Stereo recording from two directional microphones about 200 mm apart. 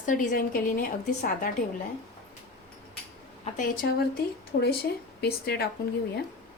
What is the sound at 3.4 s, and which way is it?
Speech, 40° left (ahead or behind).